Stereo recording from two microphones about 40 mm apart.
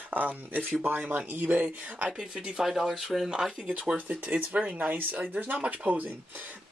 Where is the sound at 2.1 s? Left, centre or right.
Centre.